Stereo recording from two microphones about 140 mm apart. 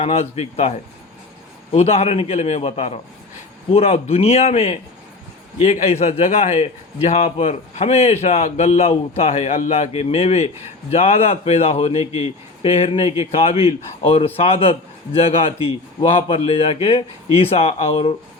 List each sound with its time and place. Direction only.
0.0 s a man's voice: 45° left (ahead or behind)
1.7 s a man's voice: 45° left (ahead or behind)